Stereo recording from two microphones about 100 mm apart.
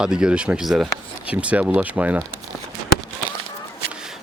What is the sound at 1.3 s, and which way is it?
Speech, 15° right (ahead or behind).